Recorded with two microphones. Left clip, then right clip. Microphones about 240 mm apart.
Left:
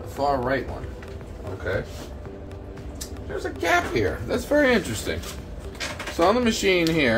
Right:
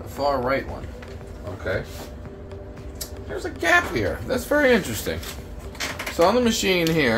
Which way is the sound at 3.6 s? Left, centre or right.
Centre.